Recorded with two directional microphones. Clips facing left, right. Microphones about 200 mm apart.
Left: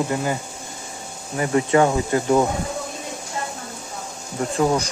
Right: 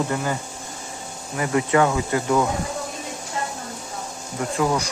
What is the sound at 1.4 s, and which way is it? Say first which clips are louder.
Speech: left 2 dB; 30° left (ahead or behind).